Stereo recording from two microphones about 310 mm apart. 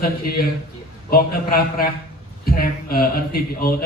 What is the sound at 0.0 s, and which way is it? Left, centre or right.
Speech, left.